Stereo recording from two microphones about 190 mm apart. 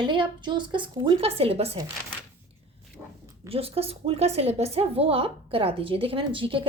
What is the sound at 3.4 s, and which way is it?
A woman's voice, 30° right (ahead or behind).